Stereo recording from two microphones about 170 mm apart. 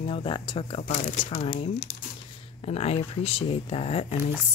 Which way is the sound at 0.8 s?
45° left (ahead or behind).